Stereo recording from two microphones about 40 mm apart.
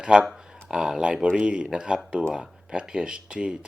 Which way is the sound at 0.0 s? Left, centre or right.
Centre.